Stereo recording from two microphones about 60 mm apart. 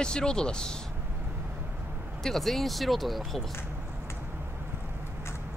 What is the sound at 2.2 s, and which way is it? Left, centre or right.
Speech, centre.